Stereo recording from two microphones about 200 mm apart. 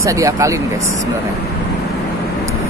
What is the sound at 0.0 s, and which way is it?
Speech, 15° right (ahead or behind).